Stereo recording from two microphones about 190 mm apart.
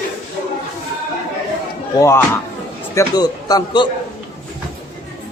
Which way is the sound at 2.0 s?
15° left (ahead or behind).